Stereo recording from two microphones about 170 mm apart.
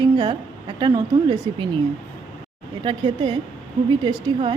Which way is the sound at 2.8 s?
30° right (ahead or behind).